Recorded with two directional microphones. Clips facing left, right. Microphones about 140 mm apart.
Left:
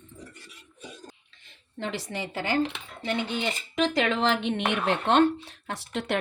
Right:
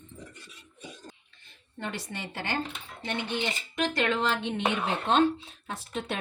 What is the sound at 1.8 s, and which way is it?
Speech, 90° left.